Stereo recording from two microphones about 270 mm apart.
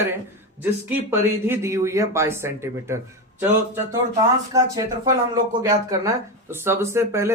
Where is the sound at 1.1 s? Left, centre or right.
Centre.